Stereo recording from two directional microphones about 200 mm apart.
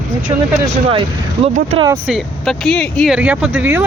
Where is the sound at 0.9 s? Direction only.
30° right (ahead or behind).